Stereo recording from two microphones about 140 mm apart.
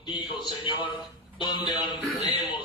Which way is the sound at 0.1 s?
35° left (ahead or behind).